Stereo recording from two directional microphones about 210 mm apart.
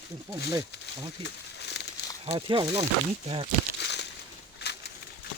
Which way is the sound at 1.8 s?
55° left (ahead or behind).